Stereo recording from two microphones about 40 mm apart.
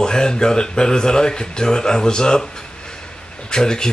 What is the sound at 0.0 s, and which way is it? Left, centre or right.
Speech, centre.